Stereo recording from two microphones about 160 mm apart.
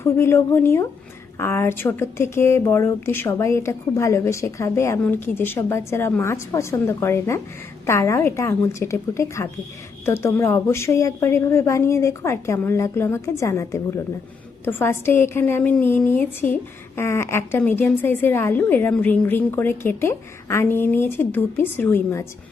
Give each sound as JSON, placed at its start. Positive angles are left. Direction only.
{"t": 0.0, "sound": "speech", "side_deg": 15}